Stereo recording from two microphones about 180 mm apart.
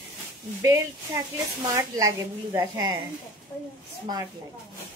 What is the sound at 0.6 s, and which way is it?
A woman's voice, 15° right (ahead or behind).